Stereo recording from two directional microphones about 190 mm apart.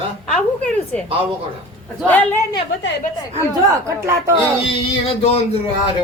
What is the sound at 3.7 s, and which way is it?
Speech, 15° right (ahead or behind).